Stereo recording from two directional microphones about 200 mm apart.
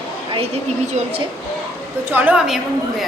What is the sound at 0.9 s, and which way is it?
Speech, 30° right (ahead or behind).